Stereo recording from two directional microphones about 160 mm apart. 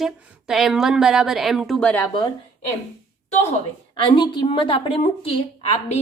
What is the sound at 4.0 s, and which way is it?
Speech, 30° left (ahead or behind).